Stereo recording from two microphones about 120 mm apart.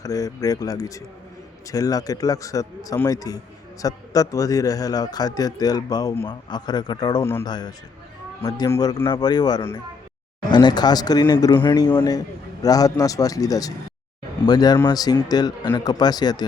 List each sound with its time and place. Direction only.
0.0 s a man's voice: 30° left (ahead or behind)
7.2 s speech: 20° left (ahead or behind)
7.4 s a man's voice: 35° left (ahead or behind)